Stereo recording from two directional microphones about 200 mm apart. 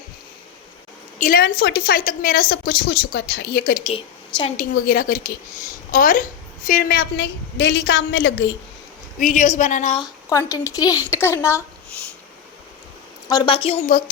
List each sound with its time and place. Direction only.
1.2 s a woman's voice: 45° left (ahead or behind); by 8.5 s 60° left (ahead or behind)
9.1 s a woman's voice: 35° left (ahead or behind)
10.0 s a woman's voice: 15° left (ahead or behind)
13.2 s a woman's voice: 20° left (ahead or behind)